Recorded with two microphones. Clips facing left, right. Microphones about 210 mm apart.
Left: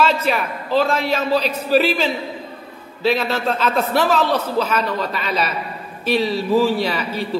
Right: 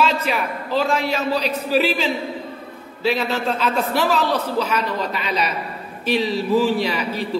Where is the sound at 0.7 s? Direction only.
15° right (ahead or behind).